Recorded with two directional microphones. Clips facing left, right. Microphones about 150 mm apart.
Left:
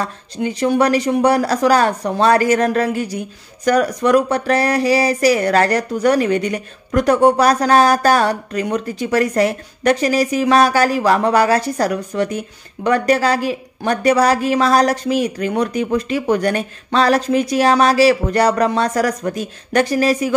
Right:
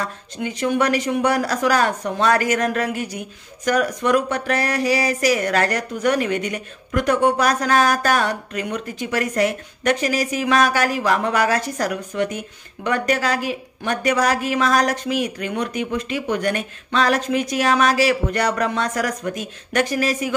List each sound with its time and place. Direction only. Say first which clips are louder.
0.0 s speech: left 5 dB; 35° left (ahead or behind)